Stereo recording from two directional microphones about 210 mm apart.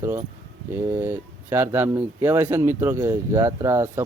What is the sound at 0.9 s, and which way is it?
Speech, 10° right (ahead or behind).